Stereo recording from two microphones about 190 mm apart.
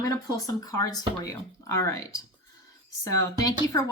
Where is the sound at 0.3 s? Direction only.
20° left (ahead or behind).